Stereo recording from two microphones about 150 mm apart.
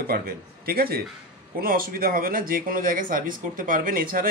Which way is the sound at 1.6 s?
75° right (ahead or behind).